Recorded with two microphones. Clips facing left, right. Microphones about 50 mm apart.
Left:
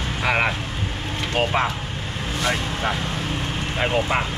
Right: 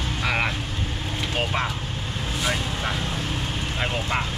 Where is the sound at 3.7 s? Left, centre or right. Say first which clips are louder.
Left 6 dB; centre.